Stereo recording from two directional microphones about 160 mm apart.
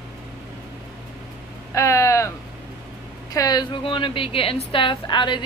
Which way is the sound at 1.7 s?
20° left (ahead or behind).